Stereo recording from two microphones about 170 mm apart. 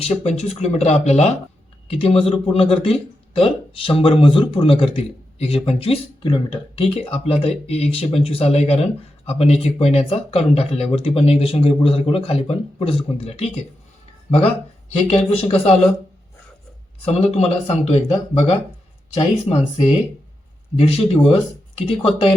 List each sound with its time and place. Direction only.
0.0 s speech: 35° left (ahead or behind)
17.1 s speech: 35° left (ahead or behind)
19.1 s speech: 35° left (ahead or behind)